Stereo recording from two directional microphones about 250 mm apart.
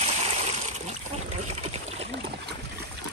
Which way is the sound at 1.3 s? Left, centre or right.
Right.